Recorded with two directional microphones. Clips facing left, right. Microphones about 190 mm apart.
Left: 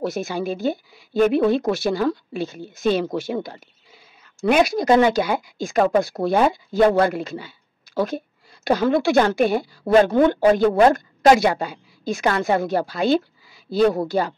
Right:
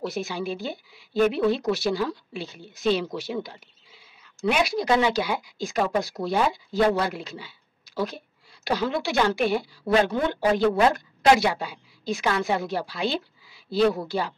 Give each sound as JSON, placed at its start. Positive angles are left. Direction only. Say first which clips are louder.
{"t": 0.0, "sound": "a woman's voice", "louder": "left 5 dB", "side_deg": 45}